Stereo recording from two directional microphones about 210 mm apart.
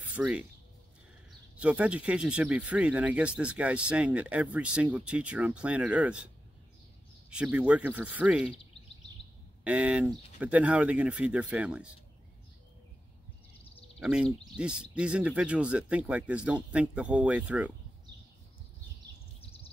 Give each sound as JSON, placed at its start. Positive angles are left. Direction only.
{"t": 0.1, "sound": "speech", "side_deg": -5}
{"t": 1.6, "sound": "speech", "side_deg": -5}
{"t": 9.7, "sound": "speech", "side_deg": -5}
{"t": 13.9, "sound": "speech", "side_deg": 0}
{"t": 19.4, "sound": "bird vocalization", "side_deg": 25}